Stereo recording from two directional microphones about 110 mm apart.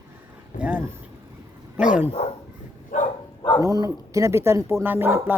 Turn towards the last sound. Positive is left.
turn(degrees=-20)  # may be behind; listen again after turning